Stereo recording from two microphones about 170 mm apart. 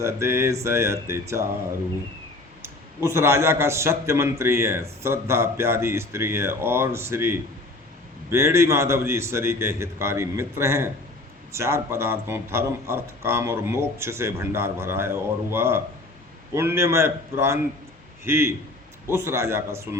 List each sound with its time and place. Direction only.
0.0 s a man's voice: 15° right (ahead or behind)
2.6 s a man's voice: 15° right (ahead or behind)